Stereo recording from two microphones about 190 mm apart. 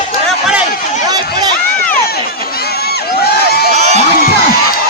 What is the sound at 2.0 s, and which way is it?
Crowd, 55° left (ahead or behind).